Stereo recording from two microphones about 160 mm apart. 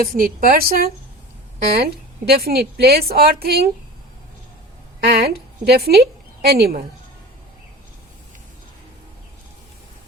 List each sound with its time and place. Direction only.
0.0 s a woman's voice: 60° right (ahead or behind)
5.2 s a woman's voice: 85° right